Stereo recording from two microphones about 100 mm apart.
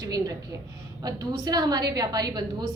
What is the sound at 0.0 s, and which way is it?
A woman's voice, 40° right (ahead or behind).